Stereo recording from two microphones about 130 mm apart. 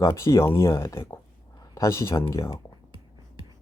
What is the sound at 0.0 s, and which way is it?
Speech, 25° left (ahead or behind).